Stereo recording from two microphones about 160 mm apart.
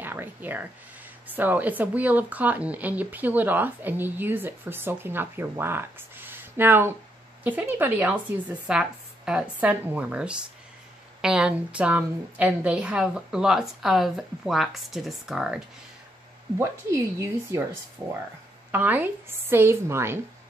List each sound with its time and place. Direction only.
0.0 s a sound: 10° right (ahead or behind)
1.2 s a woman's voice: 10° right (ahead or behind)
16.5 s speech: 15° right (ahead or behind)
18.7 s speech: 10° right (ahead or behind)